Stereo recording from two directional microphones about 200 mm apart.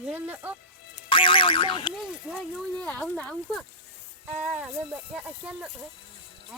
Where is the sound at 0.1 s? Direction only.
10° right (ahead or behind).